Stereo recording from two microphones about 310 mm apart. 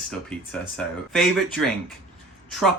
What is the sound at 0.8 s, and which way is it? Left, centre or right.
Speech, centre.